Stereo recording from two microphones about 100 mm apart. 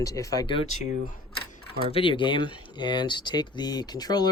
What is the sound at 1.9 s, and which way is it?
Speech, 60° left (ahead or behind).